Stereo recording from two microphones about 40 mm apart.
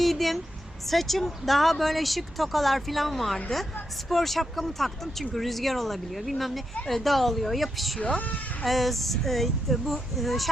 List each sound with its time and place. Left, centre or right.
0.0 s a sound: centre
0.9 s speech: centre
7.9 s speech: left
8.6 s speech: centre